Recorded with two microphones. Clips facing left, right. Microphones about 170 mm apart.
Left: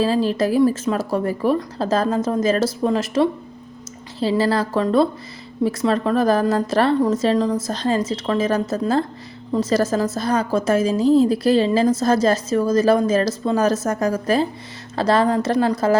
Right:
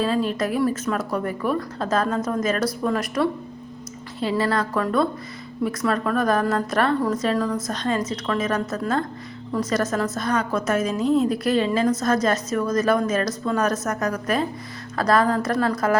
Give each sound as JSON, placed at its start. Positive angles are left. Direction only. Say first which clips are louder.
{"t": 0.0, "sound": "a woman's voice", "louder": "left 4 dB", "side_deg": 30}